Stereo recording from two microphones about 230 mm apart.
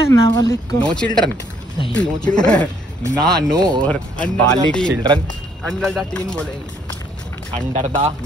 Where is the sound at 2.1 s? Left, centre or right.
Centre.